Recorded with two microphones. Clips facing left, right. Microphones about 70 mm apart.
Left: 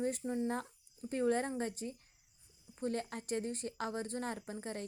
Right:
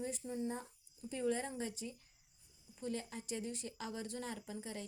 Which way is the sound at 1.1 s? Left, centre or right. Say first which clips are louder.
Left 5 dB; left.